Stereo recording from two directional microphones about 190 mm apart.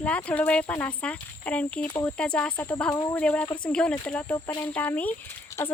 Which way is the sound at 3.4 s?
25° left (ahead or behind).